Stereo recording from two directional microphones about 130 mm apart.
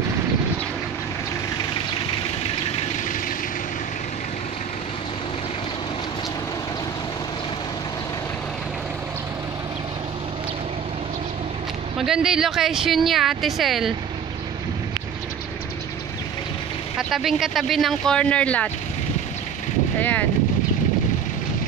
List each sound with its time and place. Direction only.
12.0 s speech: 5° right (ahead or behind)
17.1 s speech: 5° right (ahead or behind)
20.0 s speech: 15° left (ahead or behind)